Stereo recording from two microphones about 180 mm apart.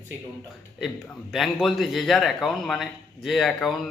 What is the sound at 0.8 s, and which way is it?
Speech, centre (ahead or behind).